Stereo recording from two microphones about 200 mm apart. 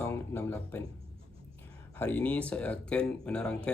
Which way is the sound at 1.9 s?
5° left (ahead or behind).